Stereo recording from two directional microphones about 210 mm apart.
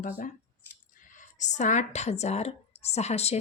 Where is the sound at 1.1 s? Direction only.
35° left (ahead or behind).